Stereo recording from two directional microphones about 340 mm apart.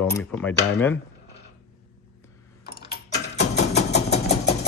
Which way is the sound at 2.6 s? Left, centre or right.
Left.